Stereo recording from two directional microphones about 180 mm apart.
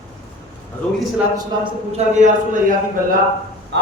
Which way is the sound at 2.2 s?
45° right (ahead or behind).